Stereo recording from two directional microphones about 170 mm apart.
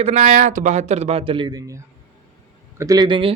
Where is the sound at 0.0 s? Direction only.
40° right (ahead or behind).